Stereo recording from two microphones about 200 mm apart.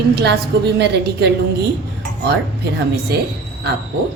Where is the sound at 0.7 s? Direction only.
55° right (ahead or behind).